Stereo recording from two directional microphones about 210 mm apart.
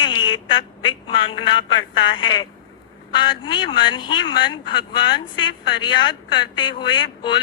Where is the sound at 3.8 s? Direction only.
20° left (ahead or behind).